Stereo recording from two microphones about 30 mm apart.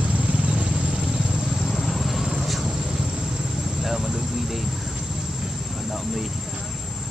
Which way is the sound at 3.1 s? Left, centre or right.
Right.